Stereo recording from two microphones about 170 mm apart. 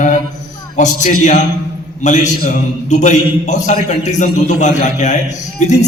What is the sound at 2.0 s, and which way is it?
A man's voice, 45° left (ahead or behind).